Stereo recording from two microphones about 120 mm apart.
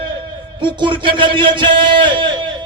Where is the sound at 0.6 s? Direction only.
45° right (ahead or behind).